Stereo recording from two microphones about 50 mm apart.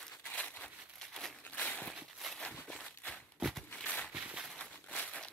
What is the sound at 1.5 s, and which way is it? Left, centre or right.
Walk, left.